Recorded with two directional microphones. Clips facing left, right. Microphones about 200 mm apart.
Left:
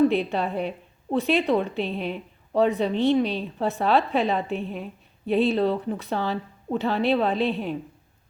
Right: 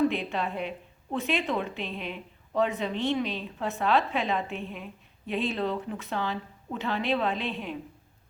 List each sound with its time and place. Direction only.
0.1 s a woman's voice: 35° left (ahead or behind)